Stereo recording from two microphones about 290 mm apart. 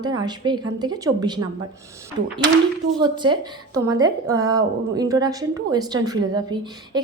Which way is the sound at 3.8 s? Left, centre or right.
Centre.